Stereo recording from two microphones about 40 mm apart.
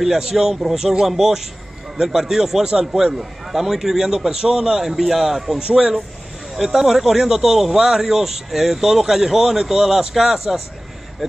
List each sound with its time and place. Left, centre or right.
0.0 s speech: centre
5.6 s speech: centre